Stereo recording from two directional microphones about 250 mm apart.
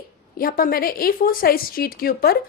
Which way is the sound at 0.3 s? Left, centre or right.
Left.